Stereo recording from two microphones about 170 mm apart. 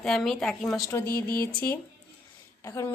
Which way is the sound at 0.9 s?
15° left (ahead or behind).